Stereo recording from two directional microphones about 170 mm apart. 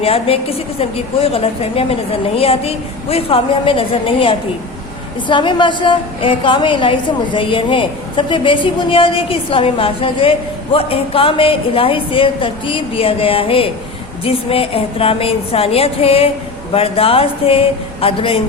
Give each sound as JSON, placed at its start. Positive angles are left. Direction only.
{"t": 0.0, "sound": "a woman's voice", "side_deg": 35}